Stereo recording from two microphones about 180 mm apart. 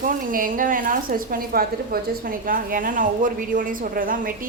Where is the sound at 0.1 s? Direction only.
50° right (ahead or behind).